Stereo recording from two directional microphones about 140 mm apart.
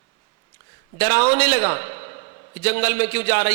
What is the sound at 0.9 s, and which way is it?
A man's voice, 15° left (ahead or behind).